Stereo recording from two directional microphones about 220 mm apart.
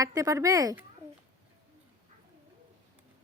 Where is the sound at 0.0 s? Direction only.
15° right (ahead or behind).